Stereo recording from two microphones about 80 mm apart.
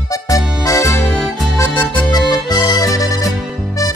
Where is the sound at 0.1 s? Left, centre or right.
Left.